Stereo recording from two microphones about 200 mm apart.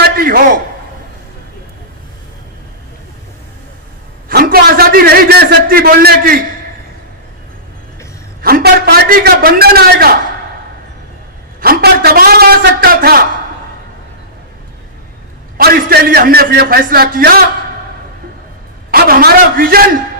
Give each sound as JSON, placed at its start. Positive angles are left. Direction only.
{"t": 0.0, "sound": "a sound", "side_deg": -45}
{"t": 4.3, "sound": "a man's voice", "side_deg": -50}
{"t": 8.4, "sound": "a man's voice", "side_deg": -50}
{"t": 11.6, "sound": "a man's voice", "side_deg": -50}
{"t": 15.5, "sound": "a man's voice", "side_deg": -50}
{"t": 18.9, "sound": "a man's voice", "side_deg": -50}